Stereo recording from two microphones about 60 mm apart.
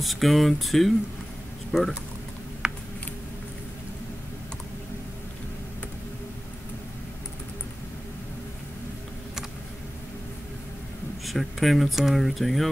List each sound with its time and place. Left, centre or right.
0.0 s speech: centre
2.6 s a sound: centre
11.2 s speech: centre